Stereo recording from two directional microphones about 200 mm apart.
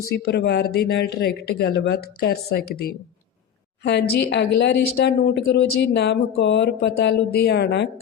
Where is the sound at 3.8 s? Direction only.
60° left (ahead or behind).